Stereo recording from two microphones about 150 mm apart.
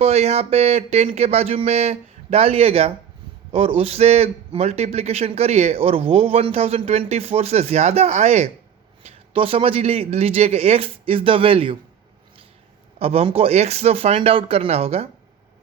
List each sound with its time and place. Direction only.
0.0 s a man's voice: 45° right (ahead or behind)
13.0 s speech: 40° right (ahead or behind)